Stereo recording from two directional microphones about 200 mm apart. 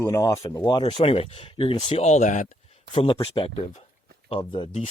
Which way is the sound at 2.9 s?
25° left (ahead or behind).